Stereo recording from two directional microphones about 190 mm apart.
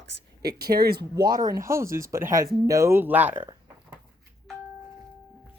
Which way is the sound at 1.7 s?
15° right (ahead or behind).